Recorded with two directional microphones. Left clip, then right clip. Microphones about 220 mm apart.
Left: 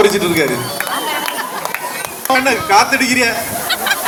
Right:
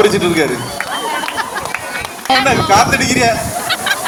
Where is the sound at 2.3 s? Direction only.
45° right (ahead or behind).